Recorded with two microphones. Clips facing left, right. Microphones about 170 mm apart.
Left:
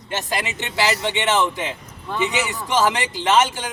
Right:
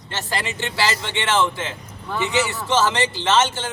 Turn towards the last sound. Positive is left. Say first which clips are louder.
# left 1 dB
turn(degrees=15)  # may be behind; listen again after turning